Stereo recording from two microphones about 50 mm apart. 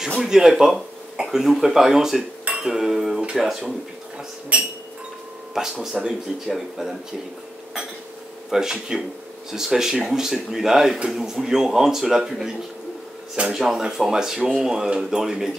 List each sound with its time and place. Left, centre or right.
0.3 s speech: centre
2.5 s dishes: centre
3.3 s speech: centre
4.5 s chink: centre
5.5 s speech: centre
8.5 s speech: centre